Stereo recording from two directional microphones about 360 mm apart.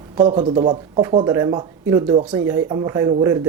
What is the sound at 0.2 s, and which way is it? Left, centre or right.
Speech, centre.